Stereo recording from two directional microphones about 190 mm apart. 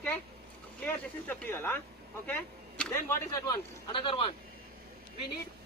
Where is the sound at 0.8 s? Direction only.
10° left (ahead or behind).